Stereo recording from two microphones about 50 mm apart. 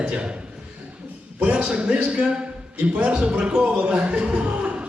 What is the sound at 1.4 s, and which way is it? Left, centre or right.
A man's voice, right.